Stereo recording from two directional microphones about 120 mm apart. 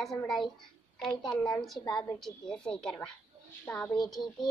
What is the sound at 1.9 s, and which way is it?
Speech, 5° left (ahead or behind).